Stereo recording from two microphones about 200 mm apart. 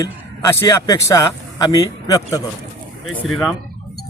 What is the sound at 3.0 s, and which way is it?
Speech, centre (ahead or behind).